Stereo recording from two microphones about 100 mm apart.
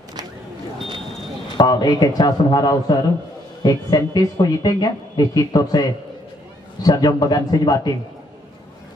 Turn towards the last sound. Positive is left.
turn(degrees=40)  # may be behind; listen again after turning